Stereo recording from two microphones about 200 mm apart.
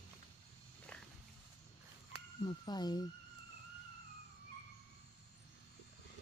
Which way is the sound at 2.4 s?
20° left (ahead or behind).